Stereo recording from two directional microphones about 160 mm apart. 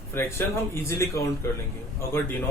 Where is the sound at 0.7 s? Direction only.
15° left (ahead or behind).